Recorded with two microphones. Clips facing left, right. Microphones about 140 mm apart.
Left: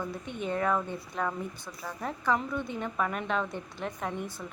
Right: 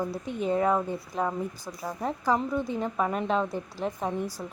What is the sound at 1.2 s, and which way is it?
Speech, 35° right (ahead or behind).